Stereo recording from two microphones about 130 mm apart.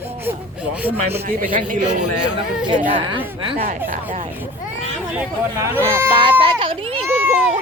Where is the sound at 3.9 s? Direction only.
90° right.